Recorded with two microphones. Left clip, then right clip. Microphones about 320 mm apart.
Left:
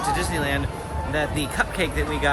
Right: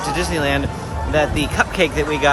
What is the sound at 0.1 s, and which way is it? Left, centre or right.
Speech, centre.